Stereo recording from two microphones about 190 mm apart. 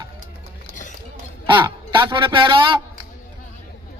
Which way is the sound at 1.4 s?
25° right (ahead or behind).